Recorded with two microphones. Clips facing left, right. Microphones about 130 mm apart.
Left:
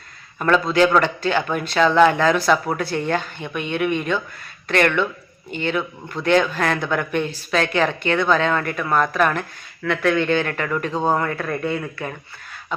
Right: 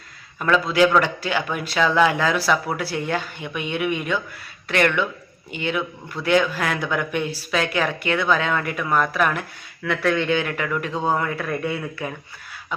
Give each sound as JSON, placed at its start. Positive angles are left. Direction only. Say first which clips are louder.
{"t": 0.3, "sound": "a man's voice", "louder": "left 1 dB", "side_deg": -5}
{"t": 6.2, "sound": "a man's voice", "louder": "left 3 dB", "side_deg": 20}
{"t": 6.5, "sound": "speech", "louder": "left 3 dB", "side_deg": -10}